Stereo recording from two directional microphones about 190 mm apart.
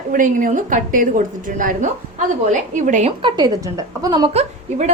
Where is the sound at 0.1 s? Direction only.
45° right (ahead or behind).